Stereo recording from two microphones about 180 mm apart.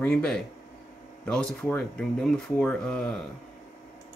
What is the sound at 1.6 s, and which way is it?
Speech, 5° left (ahead or behind).